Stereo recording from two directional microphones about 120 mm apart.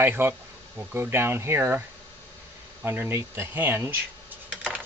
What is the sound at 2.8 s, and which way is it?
Speech, 15° right (ahead or behind).